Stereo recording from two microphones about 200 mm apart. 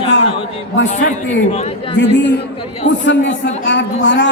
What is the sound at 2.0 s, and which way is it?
A man's voice, 60° left (ahead or behind).